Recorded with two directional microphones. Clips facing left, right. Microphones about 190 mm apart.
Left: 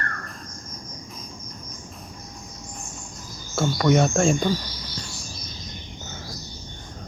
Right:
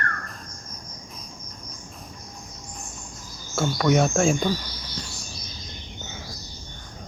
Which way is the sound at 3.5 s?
Centre (ahead or behind).